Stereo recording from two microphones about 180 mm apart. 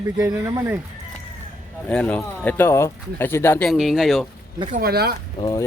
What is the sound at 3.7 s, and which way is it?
Speech, centre (ahead or behind).